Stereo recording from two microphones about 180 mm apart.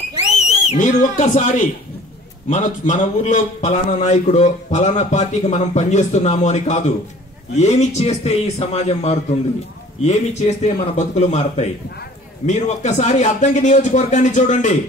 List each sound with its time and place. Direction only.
0.5 s a man's voice: 40° left (ahead or behind)